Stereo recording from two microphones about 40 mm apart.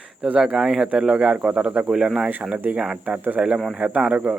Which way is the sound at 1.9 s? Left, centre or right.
Centre.